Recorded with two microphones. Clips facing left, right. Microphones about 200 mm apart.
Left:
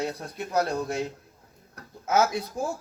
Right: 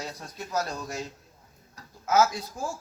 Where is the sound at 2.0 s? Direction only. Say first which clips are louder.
Even; 25° left (ahead or behind).